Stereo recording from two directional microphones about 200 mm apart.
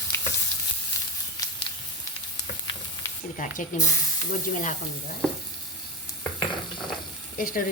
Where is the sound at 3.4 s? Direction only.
40° left (ahead or behind).